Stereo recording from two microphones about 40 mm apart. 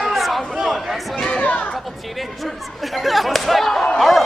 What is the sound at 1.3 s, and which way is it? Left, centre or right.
Speech, left.